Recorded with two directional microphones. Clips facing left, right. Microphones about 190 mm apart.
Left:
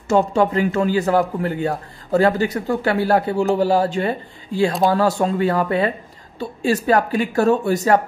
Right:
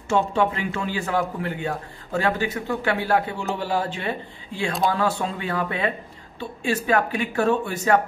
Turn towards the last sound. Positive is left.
turn(degrees=40)  # may be behind; listen again after turning